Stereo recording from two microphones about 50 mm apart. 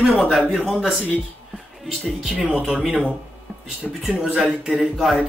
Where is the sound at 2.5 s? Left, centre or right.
Centre.